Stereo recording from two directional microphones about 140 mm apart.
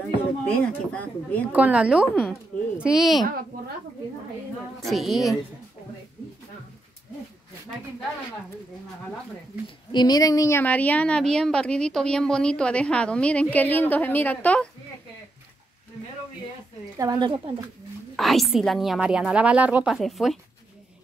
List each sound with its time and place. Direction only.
0.5 s a woman's voice: 10° left (ahead or behind)
1.5 s a woman's voice: 10° right (ahead or behind)
4.7 s a woman's voice: centre (ahead or behind)
9.9 s speech: 30° left (ahead or behind)
10.6 s a woman's voice: 10° left (ahead or behind)
17.0 s speech: 35° right (ahead or behind)
18.1 s a woman's voice: centre (ahead or behind)